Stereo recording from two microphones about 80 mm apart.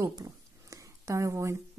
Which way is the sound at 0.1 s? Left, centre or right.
Right.